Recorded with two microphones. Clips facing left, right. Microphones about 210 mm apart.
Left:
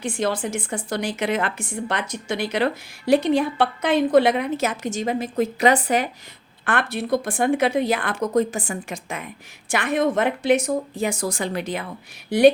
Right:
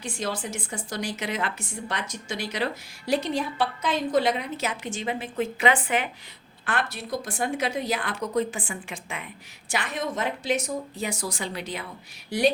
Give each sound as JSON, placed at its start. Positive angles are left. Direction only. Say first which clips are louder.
{"t": 0.0, "sound": "a woman's voice", "louder": "left 7 dB", "side_deg": 55}
{"t": 6.7, "sound": "a woman's voice", "louder": "left 7 dB", "side_deg": 55}